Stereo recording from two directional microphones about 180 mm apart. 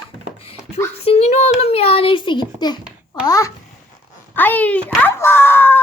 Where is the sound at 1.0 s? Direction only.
35° left (ahead or behind).